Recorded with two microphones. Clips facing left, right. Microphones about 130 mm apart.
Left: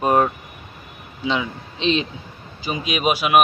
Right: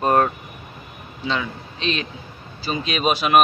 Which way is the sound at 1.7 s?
25° left (ahead or behind).